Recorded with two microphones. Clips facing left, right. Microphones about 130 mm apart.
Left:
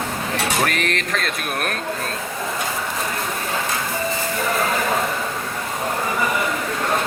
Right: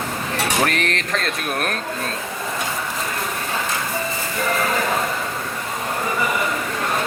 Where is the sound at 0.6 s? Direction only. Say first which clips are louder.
Right 1 dB; centre (ahead or behind).